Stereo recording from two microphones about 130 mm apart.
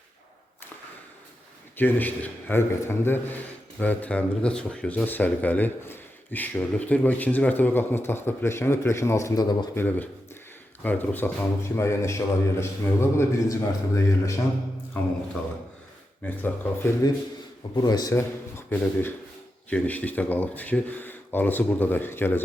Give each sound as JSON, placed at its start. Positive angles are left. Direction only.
{"t": 1.7, "sound": "speech", "side_deg": 15}
{"t": 9.7, "sound": "a man's voice", "side_deg": 15}
{"t": 16.2, "sound": "speech", "side_deg": 15}
{"t": 17.7, "sound": "a man's voice", "side_deg": 30}